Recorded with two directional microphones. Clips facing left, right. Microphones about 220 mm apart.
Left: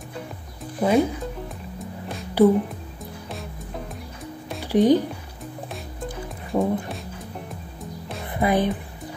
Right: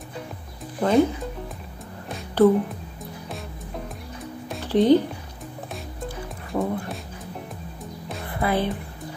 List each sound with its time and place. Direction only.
0.7 s speech: 10° left (ahead or behind)
2.4 s speech: 10° left (ahead or behind)
3.3 s music: centre (ahead or behind)
4.6 s music: 15° left (ahead or behind)
6.0 s music: 20° left (ahead or behind)
8.4 s speech: 15° left (ahead or behind)